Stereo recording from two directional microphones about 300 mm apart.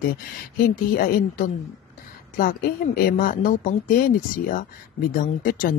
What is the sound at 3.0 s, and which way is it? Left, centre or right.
Speech, left.